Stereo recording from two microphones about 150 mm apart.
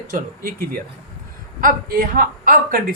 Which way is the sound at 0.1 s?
70° right (ahead or behind).